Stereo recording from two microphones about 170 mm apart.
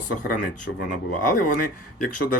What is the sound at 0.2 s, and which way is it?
Speech, 50° left (ahead or behind).